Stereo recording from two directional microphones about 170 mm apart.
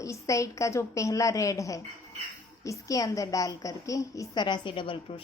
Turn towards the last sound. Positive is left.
turn(degrees=30)  # may be behind; listen again after turning